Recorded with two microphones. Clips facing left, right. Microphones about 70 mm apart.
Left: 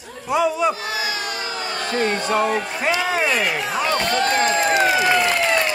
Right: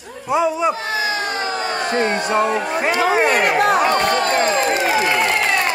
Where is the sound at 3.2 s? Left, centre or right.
Right.